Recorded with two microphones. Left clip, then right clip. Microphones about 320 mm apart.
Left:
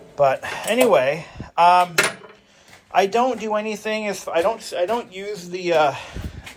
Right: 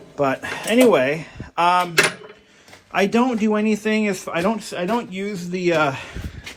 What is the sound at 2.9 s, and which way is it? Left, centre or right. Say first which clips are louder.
Speech: left 1 dB; centre.